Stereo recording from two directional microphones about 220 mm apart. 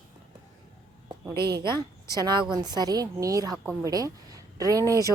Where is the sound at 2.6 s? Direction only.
20° right (ahead or behind).